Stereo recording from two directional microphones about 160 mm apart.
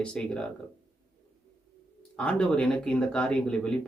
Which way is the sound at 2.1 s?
5° left (ahead or behind).